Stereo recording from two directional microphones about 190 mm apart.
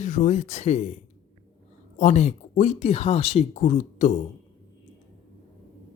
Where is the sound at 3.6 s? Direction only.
45° left (ahead or behind).